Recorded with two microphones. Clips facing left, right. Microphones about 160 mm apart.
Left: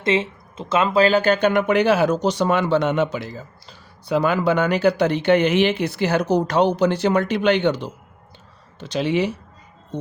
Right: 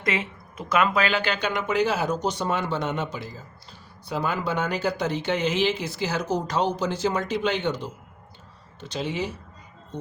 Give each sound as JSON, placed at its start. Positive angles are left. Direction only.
{"t": 0.0, "sound": "speech", "side_deg": 25}